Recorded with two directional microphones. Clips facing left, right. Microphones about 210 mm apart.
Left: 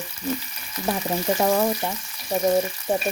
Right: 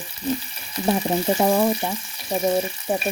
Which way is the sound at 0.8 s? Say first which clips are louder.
Right 4 dB; 25° right (ahead or behind).